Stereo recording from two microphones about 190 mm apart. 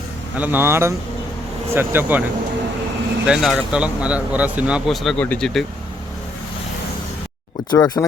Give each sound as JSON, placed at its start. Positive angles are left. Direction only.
{"t": 0.3, "sound": "speech", "side_deg": -10}
{"t": 3.2, "sound": "speech", "side_deg": -5}
{"t": 7.7, "sound": "speech", "side_deg": 20}